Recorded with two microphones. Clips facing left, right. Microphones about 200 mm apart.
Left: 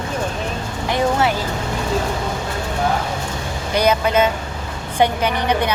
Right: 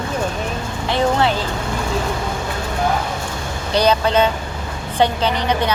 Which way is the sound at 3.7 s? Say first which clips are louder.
Right 1 dB; 10° left (ahead or behind).